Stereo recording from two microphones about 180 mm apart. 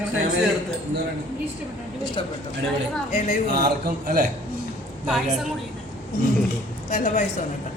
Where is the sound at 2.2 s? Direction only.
30° left (ahead or behind).